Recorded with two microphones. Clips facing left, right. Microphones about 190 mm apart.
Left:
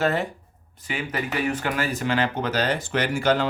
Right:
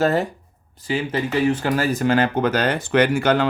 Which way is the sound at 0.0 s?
40° right (ahead or behind).